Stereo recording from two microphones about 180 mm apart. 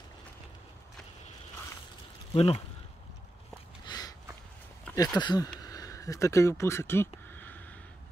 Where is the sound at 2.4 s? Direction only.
35° left (ahead or behind).